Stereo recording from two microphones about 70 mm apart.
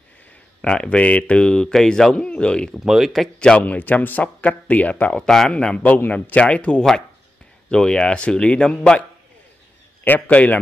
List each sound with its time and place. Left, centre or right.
0.6 s speech: centre
2.7 s speech: centre
3.3 s speech: centre
5.2 s speech: centre
5.5 s speech: centre
10.0 s speech: left